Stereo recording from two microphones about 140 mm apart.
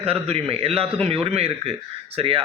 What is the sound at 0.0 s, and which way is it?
A man's voice, 45° right (ahead or behind).